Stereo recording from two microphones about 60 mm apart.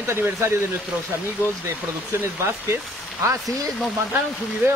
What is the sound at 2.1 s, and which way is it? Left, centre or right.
Speech, right.